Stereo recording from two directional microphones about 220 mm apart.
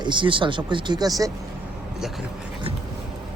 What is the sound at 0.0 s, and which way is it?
Speech, 20° right (ahead or behind).